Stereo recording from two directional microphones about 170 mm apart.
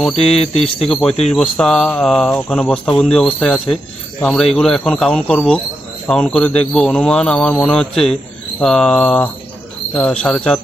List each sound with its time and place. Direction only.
0.0 s speech: 5° left (ahead or behind)